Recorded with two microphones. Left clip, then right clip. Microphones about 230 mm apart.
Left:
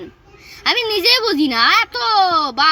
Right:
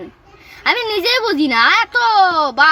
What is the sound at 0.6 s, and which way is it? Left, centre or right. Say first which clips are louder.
A child's voice: even; centre.